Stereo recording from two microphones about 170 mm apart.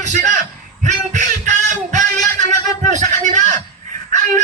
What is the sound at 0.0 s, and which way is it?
Speech, 45° right (ahead or behind).